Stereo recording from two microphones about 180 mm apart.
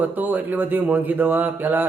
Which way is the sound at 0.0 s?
10° right (ahead or behind).